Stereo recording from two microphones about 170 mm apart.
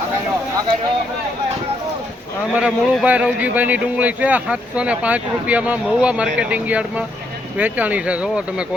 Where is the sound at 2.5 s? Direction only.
5° right (ahead or behind).